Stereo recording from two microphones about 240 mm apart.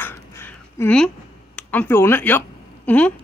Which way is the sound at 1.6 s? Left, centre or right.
Centre.